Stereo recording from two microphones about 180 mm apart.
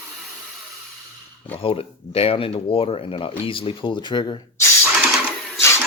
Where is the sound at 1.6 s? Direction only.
30° left (ahead or behind).